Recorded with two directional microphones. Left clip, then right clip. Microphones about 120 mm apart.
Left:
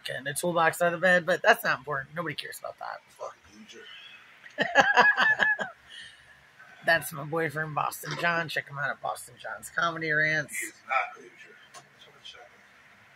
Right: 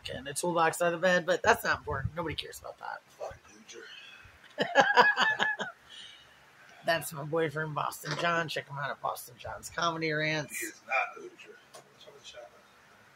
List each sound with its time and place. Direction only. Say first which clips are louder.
0.0 s speech: left 4 dB; 5° right (ahead or behind)
0.6 s speech: left 3 dB; 15° right (ahead or behind)
4.6 s a sound: left 2 dB; 15° right (ahead or behind)
6.8 s speech: left 5 dB; 15° right (ahead or behind)
9.4 s speech: left 4 dB; 35° right (ahead or behind)